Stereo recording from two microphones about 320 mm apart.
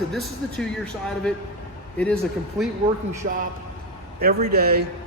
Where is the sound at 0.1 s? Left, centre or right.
Centre.